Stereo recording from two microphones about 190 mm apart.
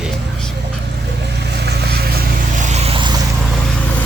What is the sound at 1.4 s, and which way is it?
Vehicle, 60° right (ahead or behind).